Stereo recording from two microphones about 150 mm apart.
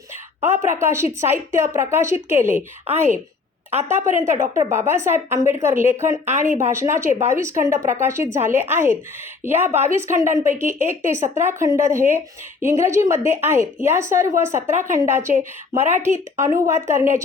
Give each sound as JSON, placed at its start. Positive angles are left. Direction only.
{"t": 0.4, "sound": "a woman's voice", "side_deg": -15}
{"t": 3.8, "sound": "a woman's voice", "side_deg": -20}